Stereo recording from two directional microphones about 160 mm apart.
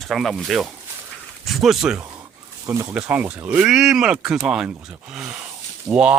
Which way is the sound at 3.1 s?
5° right (ahead or behind).